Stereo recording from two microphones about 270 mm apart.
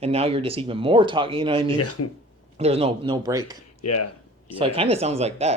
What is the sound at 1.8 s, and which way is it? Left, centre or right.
Speech, left.